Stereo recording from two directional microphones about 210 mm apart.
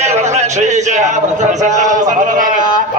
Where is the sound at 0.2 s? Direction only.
35° right (ahead or behind).